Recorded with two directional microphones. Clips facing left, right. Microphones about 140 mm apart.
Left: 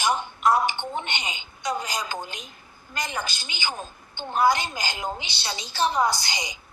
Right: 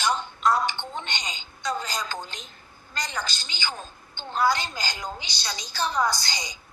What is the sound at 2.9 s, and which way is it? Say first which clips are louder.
A woman's voice: left 2 dB; 20° left (ahead or behind).